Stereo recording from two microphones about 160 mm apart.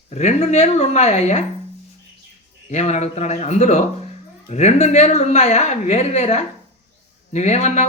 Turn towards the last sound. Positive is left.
turn(degrees=45)  # may be behind; listen again after turning